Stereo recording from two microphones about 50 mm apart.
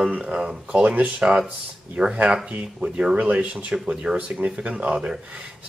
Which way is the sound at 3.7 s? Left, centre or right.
Centre.